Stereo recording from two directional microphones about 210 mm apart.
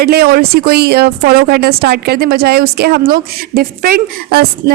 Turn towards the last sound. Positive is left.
turn(degrees=-45)  # may be behind; listen again after turning